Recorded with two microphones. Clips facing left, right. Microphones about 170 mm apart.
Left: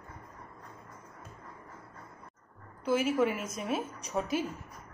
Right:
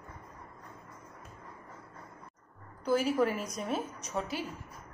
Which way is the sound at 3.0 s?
5° left (ahead or behind).